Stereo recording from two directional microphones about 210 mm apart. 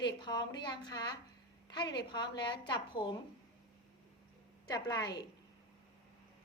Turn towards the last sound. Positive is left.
turn(degrees=20)  # may be behind; listen again after turning